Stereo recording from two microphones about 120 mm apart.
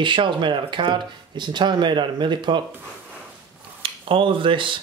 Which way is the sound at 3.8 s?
45° right (ahead or behind).